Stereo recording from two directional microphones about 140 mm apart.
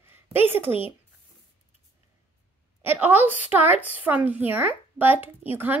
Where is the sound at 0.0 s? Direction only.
15° right (ahead or behind).